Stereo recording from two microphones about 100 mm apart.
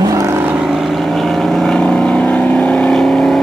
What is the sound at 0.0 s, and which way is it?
Vehicle, 30° right (ahead or behind).